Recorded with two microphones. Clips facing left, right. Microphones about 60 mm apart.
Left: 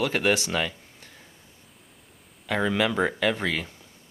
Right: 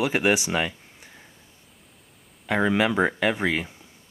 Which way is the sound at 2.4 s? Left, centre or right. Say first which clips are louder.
Right 3 dB; centre.